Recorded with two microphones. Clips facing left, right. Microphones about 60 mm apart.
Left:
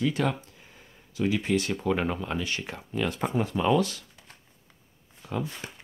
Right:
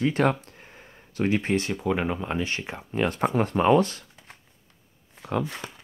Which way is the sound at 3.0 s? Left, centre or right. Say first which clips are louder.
Right 4 dB; right.